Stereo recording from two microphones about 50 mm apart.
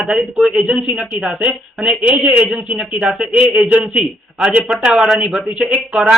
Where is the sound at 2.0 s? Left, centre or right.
Right.